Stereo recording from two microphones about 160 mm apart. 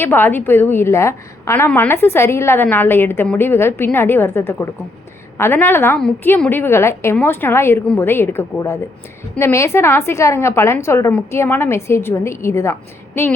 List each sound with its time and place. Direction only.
0.0 s a woman's voice: 10° left (ahead or behind)